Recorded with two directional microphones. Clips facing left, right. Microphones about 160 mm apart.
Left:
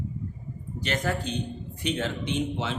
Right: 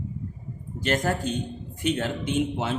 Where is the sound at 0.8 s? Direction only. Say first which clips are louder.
Right 4 dB; 45° right (ahead or behind).